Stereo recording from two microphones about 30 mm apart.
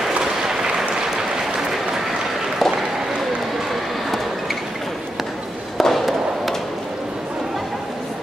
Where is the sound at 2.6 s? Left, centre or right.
Centre.